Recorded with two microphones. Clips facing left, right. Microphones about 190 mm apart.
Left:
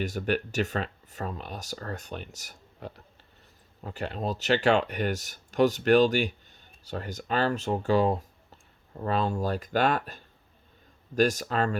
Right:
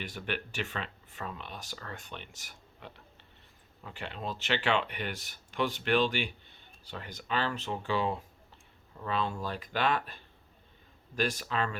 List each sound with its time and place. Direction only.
0.0 s speech: 45° left (ahead or behind)